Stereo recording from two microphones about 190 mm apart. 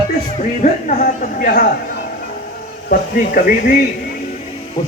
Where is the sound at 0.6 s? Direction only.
45° left (ahead or behind).